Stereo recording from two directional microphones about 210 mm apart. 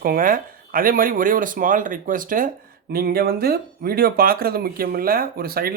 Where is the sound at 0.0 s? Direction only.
40° right (ahead or behind).